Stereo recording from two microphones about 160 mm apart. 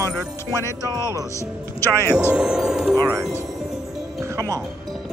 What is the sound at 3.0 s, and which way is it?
Speech, 20° right (ahead or behind).